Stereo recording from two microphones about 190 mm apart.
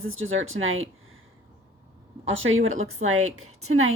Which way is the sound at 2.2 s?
90° right.